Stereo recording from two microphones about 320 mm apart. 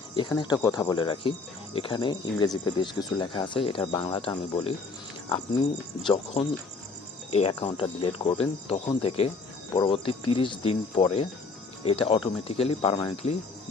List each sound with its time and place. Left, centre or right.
0.2 s speech: centre
6.1 s speech: centre